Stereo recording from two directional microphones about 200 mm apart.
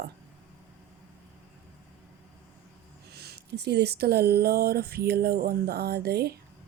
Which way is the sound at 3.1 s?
55° right (ahead or behind).